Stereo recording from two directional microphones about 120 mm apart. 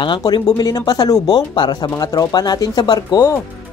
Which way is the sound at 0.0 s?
40° left (ahead or behind).